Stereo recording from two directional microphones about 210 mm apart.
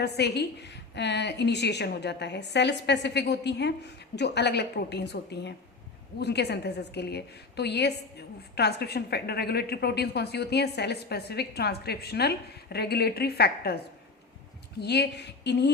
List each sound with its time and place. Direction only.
0.0 s a woman's voice: 50° left (ahead or behind)
14.8 s a woman's voice: 50° left (ahead or behind)